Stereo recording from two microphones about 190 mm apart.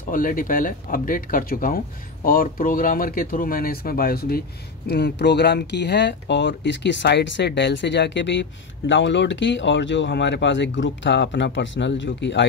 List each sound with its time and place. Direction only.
0.1 s speech: 45° left (ahead or behind); by 12.4 s 70° left (ahead or behind)